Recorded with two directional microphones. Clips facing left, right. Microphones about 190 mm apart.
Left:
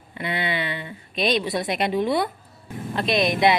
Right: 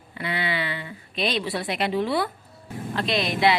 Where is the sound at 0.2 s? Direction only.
20° left (ahead or behind).